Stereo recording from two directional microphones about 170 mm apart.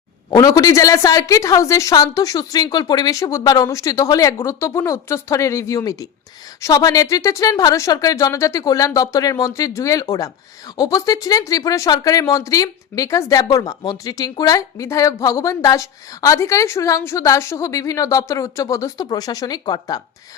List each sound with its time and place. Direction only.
0.3 s speech: 20° left (ahead or behind)